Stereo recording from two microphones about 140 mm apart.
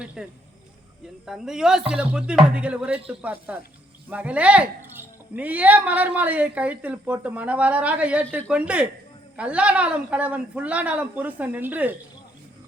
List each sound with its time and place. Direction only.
0.0 s a woman's voice: 5° right (ahead or behind)